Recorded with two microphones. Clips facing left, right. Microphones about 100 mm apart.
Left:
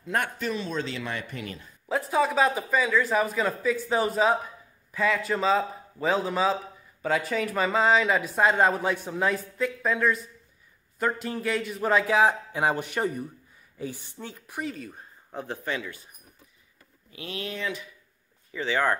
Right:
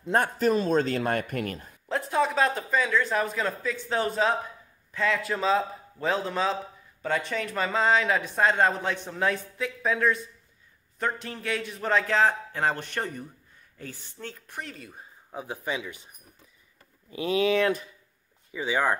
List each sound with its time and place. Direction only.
0.0 s speech: 35° right (ahead or behind); by 1.8 s 50° right (ahead or behind)
1.9 s speech: centre (ahead or behind); by 16.0 s 15° right (ahead or behind)
18.5 s speech: 10° right (ahead or behind)